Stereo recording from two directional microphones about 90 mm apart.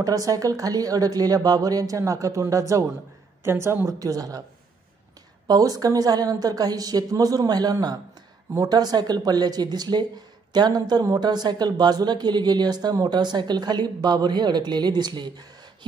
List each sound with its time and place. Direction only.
0.0 s speech: 40° right (ahead or behind)
5.5 s speech: 45° right (ahead or behind)